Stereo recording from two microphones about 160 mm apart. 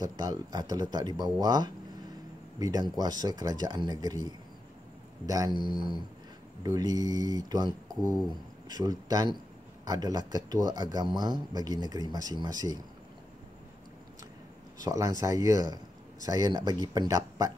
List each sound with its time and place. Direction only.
0.0 s speech: 25° right (ahead or behind)
5.2 s speech: 20° right (ahead or behind)
5.5 s speech: 30° left (ahead or behind)
6.6 s speech: 20° right (ahead or behind)
14.9 s speech: 20° right (ahead or behind)